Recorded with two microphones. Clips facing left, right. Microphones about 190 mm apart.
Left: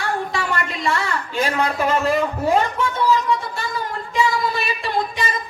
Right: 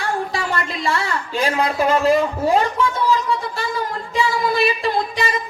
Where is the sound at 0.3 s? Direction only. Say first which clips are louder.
Right 1 dB; 35° right (ahead or behind).